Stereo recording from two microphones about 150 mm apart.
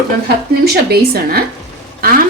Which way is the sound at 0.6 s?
90° right.